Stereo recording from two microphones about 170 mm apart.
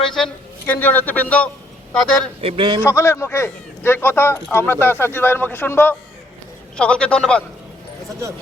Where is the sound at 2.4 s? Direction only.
35° right (ahead or behind).